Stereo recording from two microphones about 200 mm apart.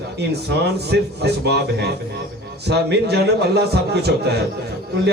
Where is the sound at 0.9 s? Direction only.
55° right (ahead or behind).